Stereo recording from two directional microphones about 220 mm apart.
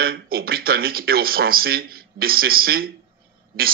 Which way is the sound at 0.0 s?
45° right (ahead or behind).